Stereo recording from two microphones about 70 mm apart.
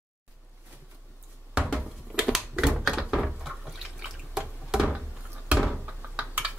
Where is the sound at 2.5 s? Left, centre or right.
Centre.